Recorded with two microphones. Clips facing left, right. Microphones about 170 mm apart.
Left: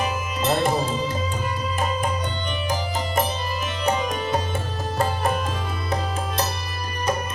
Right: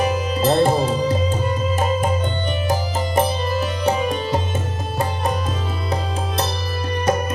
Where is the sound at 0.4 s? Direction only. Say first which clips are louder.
Right 5 dB; 35° right (ahead or behind).